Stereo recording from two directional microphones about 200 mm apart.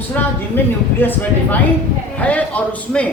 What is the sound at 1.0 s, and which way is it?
A man's voice, 10° left (ahead or behind).